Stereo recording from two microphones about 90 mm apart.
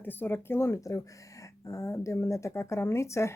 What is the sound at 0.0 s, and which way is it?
Speech, 25° left (ahead or behind).